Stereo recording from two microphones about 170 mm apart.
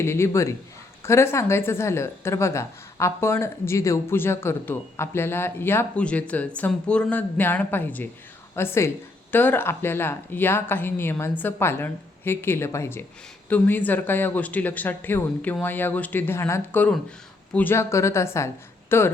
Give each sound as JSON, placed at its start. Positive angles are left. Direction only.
{"t": 0.0, "sound": "a woman's voice", "side_deg": 15}